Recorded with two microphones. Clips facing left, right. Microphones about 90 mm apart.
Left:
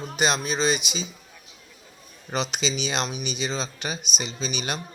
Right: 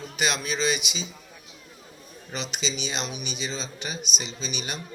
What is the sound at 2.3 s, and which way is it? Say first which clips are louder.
Speech: left 5 dB; 55° left (ahead or behind).